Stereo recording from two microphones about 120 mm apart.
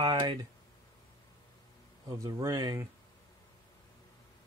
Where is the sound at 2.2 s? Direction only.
30° right (ahead or behind).